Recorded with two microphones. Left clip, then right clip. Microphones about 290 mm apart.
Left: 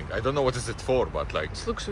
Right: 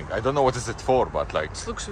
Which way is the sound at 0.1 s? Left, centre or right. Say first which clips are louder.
Right 4 dB; right.